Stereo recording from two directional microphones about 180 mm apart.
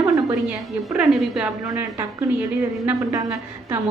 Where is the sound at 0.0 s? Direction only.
20° right (ahead or behind).